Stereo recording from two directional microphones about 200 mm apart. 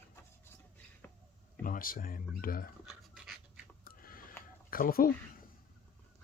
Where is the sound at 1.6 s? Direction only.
45° left (ahead or behind).